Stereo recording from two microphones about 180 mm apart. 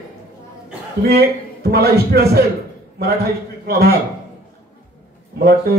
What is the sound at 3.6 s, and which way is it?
Music, 55° right (ahead or behind).